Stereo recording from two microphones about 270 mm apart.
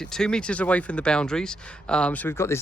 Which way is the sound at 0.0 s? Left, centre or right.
Centre.